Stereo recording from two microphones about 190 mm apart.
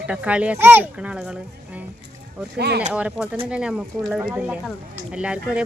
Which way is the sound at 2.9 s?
5° right (ahead or behind).